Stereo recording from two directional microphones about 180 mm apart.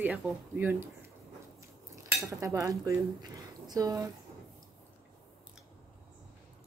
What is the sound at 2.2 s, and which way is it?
Speech, 15° right (ahead or behind).